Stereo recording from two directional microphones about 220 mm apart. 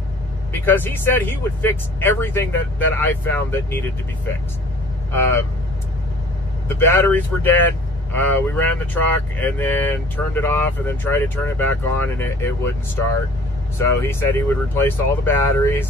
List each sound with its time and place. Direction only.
0.5 s speech: 10° left (ahead or behind)
6.9 s speech: 10° left (ahead or behind)